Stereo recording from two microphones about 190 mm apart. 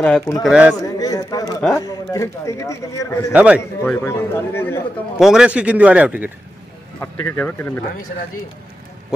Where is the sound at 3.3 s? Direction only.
5° right (ahead or behind).